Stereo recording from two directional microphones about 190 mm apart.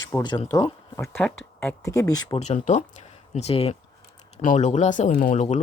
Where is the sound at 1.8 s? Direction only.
15° left (ahead or behind).